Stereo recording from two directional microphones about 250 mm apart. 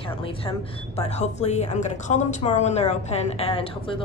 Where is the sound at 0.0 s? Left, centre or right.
Left.